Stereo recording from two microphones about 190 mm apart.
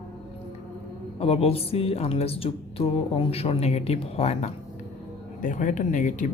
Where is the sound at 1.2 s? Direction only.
30° left (ahead or behind).